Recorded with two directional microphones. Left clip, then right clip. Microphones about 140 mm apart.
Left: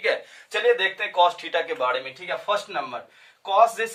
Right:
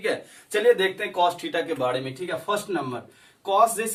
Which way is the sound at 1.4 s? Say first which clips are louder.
Left 1 dB; 25° left (ahead or behind).